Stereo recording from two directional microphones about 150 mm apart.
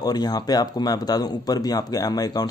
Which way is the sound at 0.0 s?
25° left (ahead or behind).